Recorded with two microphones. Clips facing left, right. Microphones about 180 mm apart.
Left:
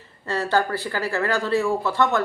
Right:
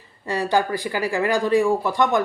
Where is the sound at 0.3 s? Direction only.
15° right (ahead or behind).